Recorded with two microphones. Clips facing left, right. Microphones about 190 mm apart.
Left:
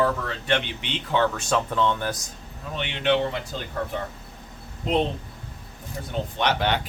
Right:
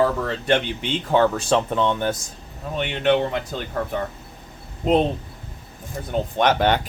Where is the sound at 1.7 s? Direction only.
20° right (ahead or behind).